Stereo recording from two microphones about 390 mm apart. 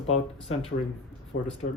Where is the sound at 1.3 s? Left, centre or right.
Left.